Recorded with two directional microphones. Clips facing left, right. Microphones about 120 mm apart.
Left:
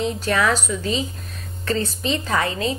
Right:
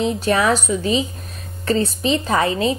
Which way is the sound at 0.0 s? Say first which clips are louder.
Right 3 dB; 20° right (ahead or behind).